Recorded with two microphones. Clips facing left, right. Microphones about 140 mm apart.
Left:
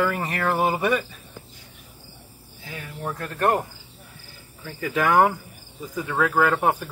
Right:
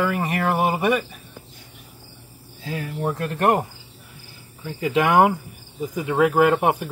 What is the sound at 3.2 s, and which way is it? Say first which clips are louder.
Speech: right 2 dB; 20° right (ahead or behind).